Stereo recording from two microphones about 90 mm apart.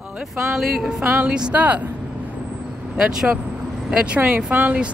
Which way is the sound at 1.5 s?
15° right (ahead or behind).